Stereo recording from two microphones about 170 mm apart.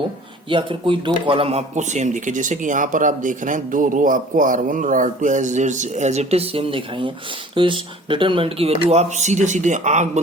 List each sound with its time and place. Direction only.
0.5 s speech: 30° right (ahead or behind)